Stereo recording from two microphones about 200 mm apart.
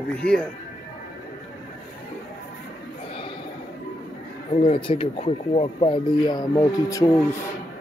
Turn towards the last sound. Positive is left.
turn(degrees=15)  # may be behind; listen again after turning